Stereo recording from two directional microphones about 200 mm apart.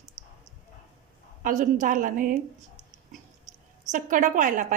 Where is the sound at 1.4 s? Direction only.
40° right (ahead or behind).